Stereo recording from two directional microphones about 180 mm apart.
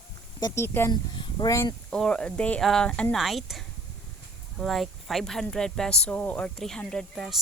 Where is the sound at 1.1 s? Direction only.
25° left (ahead or behind).